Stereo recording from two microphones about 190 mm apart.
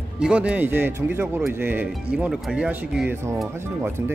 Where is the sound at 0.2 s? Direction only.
5° right (ahead or behind).